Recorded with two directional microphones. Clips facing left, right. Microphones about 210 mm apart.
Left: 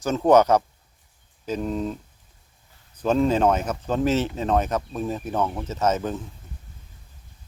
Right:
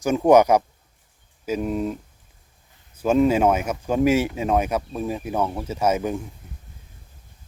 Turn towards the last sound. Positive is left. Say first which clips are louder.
# right 2 dB
turn(degrees=-10)  # may be behind; listen again after turning